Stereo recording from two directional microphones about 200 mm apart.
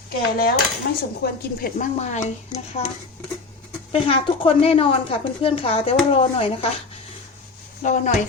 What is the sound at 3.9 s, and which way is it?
Speech, 25° left (ahead or behind).